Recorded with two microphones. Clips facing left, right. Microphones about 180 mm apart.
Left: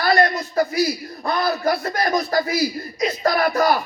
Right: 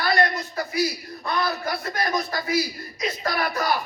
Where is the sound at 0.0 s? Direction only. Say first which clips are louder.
Left 5 dB; 35° left (ahead or behind).